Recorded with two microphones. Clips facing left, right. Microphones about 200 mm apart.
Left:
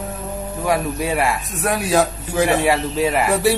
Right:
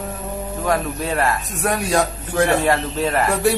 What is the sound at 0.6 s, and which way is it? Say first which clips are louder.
A man's voice: left 2 dB; 10° left (ahead or behind).